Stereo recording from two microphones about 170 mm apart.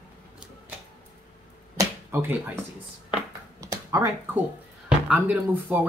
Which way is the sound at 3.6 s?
20° right (ahead or behind).